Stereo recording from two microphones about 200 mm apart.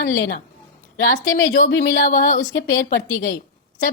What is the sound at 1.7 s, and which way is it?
Speech, 60° left (ahead or behind).